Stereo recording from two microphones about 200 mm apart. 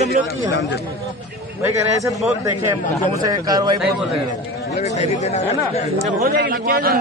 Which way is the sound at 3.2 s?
20° right (ahead or behind).